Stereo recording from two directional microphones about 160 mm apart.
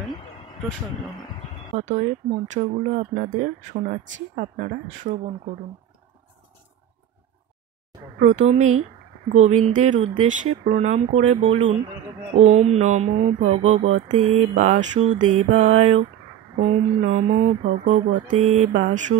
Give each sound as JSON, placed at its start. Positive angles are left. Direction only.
{"t": 1.8, "sound": "speech", "side_deg": -45}
{"t": 8.2, "sound": "speech", "side_deg": -45}
{"t": 9.9, "sound": "speech", "side_deg": -40}